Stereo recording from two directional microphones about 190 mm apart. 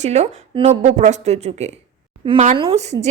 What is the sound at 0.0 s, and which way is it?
A woman's voice, 35° right (ahead or behind).